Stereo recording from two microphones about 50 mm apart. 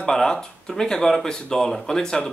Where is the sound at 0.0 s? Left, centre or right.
Centre.